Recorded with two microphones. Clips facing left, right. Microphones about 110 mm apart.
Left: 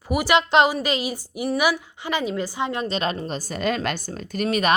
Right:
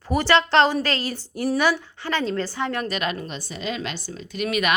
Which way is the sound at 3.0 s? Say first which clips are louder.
Left 2 dB; 35° left (ahead or behind).